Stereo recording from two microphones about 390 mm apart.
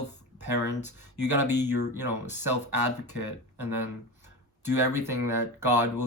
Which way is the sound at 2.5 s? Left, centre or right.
Right.